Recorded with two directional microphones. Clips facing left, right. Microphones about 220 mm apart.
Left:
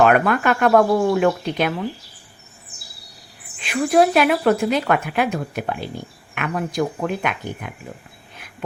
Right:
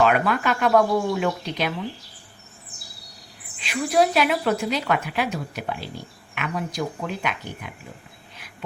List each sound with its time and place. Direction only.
0.0 s speech: 55° left (ahead or behind)
2.7 s a sound: centre (ahead or behind)
3.6 s speech: 50° left (ahead or behind)